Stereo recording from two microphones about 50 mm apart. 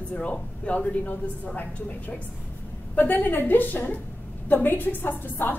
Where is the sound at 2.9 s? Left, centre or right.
Left.